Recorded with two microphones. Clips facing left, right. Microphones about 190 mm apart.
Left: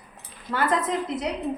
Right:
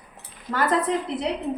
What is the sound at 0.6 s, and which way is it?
Speech, 35° right (ahead or behind).